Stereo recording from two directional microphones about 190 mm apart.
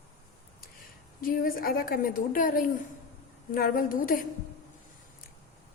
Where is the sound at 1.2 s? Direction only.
50° left (ahead or behind).